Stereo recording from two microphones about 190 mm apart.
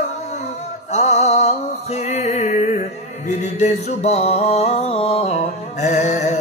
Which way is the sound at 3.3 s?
40° left (ahead or behind).